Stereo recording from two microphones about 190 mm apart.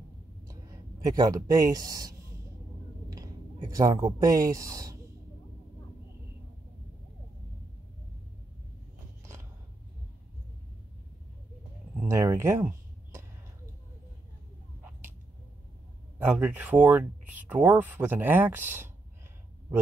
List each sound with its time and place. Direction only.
0.5 s speech: 15° right (ahead or behind)
3.1 s a sound: 20° right (ahead or behind)
4.0 s speech: 15° right (ahead or behind)
9.2 s biting: 15° right (ahead or behind)
12.0 s a sound: 15° right (ahead or behind)
16.2 s speech: 5° right (ahead or behind)